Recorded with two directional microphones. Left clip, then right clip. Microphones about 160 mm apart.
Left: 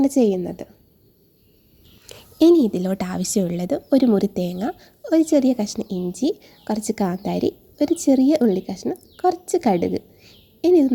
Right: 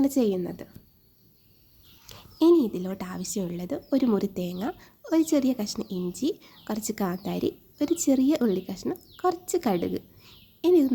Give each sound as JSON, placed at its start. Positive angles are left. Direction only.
{"t": 0.0, "sound": "a woman's voice", "side_deg": 20}
{"t": 2.0, "sound": "a woman's voice", "side_deg": 30}